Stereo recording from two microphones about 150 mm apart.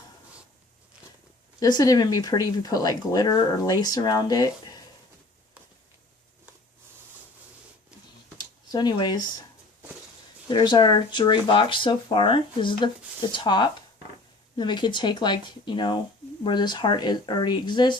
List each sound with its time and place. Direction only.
1.5 s speech: 25° left (ahead or behind)
8.4 s a sound: 25° left (ahead or behind)
10.5 s speech: 30° left (ahead or behind)